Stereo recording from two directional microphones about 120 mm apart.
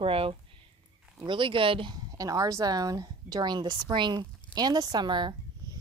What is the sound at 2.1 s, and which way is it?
A woman's voice, 30° right (ahead or behind).